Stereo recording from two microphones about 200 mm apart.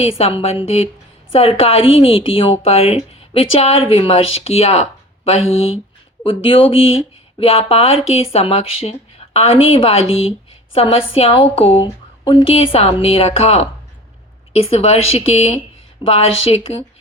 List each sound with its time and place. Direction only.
0.0 s a woman's voice: 30° left (ahead or behind)